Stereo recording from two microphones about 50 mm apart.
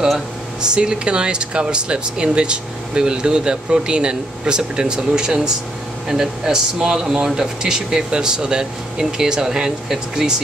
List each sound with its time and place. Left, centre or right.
0.0 s speech: centre